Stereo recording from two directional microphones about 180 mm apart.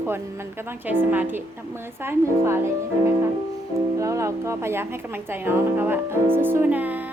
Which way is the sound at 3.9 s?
15° right (ahead or behind).